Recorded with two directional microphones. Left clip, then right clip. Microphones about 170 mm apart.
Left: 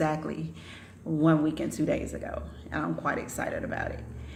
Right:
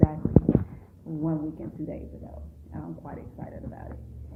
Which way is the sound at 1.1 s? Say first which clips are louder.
Left 5 dB; 45° left (ahead or behind).